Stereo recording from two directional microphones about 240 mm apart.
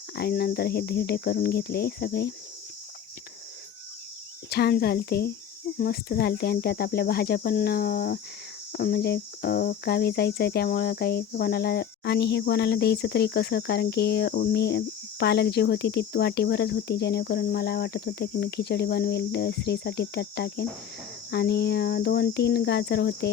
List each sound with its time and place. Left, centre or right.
0.2 s cricket: left
4.4 s cricket: left
8.7 s speech: left